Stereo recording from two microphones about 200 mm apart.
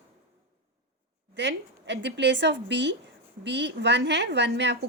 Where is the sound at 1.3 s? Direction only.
60° right (ahead or behind).